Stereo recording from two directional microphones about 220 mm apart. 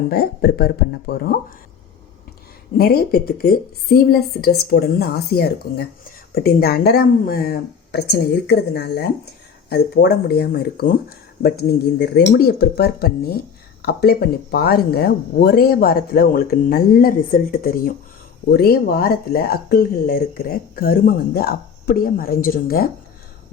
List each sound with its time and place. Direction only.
0.1 s a woman's voice: 45° left (ahead or behind)
2.7 s a woman's voice: 45° left (ahead or behind)